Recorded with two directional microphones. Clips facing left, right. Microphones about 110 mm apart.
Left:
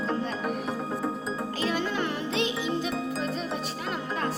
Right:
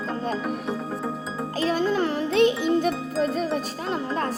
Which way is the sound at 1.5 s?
35° right (ahead or behind).